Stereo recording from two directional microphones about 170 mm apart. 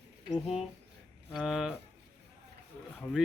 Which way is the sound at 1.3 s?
Centre (ahead or behind).